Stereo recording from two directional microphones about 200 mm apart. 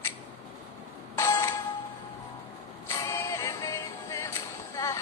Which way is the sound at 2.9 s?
15° left (ahead or behind).